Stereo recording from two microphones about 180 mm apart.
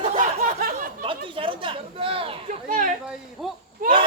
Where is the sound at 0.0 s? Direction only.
45° right (ahead or behind).